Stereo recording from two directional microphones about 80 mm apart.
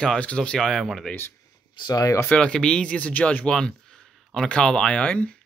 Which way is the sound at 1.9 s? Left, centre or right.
Left.